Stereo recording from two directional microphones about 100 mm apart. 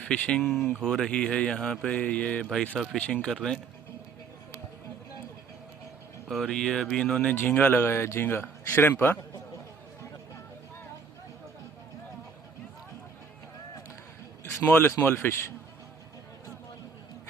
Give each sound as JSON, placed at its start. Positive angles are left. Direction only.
{"t": 0.0, "sound": "speech", "side_deg": 10}
{"t": 2.7, "sound": "speech", "side_deg": 0}
{"t": 6.2, "sound": "speech", "side_deg": 0}
{"t": 14.7, "sound": "speech", "side_deg": 20}